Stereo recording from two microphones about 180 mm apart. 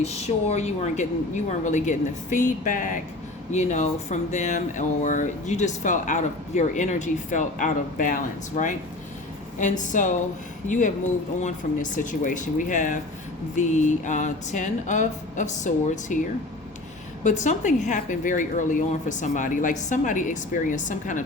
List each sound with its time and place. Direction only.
0.0 s a woman's voice: 35° left (ahead or behind)
17.2 s speech: 40° left (ahead or behind)